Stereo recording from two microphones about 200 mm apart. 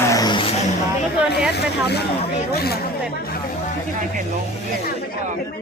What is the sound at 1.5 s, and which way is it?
Speech, 55° left (ahead or behind).